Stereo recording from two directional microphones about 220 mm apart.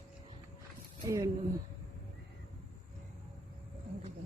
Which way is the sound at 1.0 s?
15° right (ahead or behind).